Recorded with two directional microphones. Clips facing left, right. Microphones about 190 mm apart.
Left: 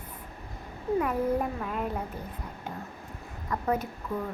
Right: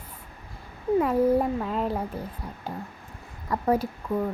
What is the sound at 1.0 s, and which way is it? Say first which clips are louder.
Speech: right 8 dB; 25° right (ahead or behind).